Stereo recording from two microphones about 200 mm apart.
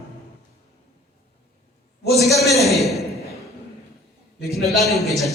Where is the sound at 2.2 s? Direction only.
Centre (ahead or behind).